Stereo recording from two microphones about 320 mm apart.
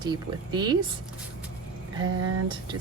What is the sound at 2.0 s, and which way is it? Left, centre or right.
Speech, right.